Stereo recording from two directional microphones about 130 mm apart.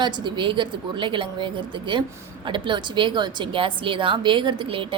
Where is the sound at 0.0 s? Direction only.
35° right (ahead or behind).